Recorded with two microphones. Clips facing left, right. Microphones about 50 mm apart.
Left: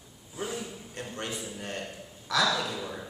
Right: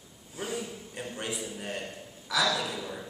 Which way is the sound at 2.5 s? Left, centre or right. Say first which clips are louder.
Left 1 dB; centre.